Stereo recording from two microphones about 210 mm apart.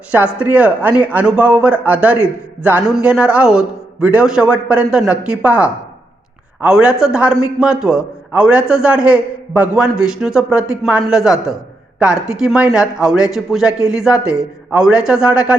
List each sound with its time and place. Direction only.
0.3 s a man's voice: 5° right (ahead or behind)